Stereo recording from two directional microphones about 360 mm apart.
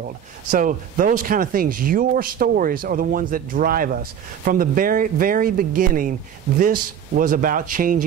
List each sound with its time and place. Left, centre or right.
0.5 s speech: right